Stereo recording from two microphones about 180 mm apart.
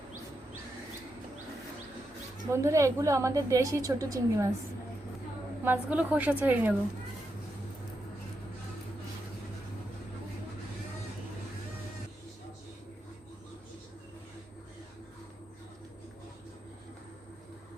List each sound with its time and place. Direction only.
2.5 s a woman's voice: 15° right (ahead or behind)
5.6 s a woman's voice: 10° right (ahead or behind)